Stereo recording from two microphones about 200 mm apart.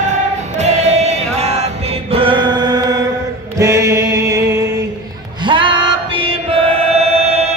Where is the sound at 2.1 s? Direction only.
25° right (ahead or behind).